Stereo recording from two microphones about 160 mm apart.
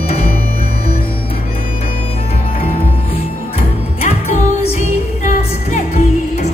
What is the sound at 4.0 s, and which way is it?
Music, 45° left (ahead or behind).